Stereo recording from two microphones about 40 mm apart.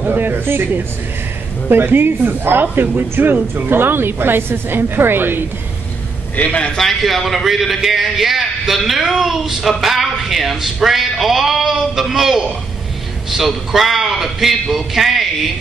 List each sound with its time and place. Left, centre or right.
0.0 s a woman's voice: right
6.5 s a man's voice: left
6.8 s speech: centre